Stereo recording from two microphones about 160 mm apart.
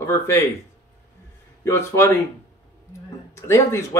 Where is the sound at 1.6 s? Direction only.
20° left (ahead or behind).